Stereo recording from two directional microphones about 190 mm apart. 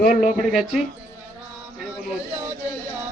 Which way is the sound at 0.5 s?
Centre (ahead or behind).